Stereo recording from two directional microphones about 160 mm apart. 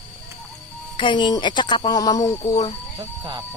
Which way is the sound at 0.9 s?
30° left (ahead or behind).